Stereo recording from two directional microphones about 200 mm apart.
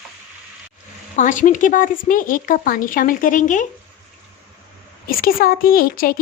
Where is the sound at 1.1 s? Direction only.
40° left (ahead or behind).